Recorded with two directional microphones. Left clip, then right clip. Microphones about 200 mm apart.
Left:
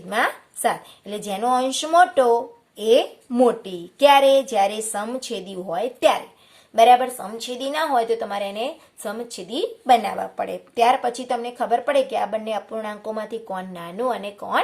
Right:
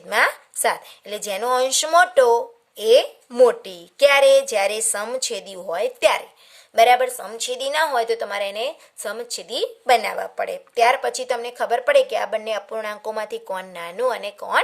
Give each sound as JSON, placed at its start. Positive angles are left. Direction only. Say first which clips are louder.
{"t": 0.1, "sound": "a woman's voice", "louder": "right 3 dB", "side_deg": -50}